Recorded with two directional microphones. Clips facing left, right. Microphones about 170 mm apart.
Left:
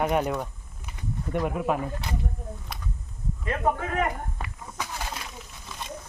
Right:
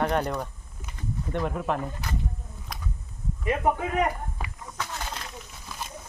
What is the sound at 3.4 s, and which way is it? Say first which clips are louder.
Speech: right 2 dB; 15° right (ahead or behind).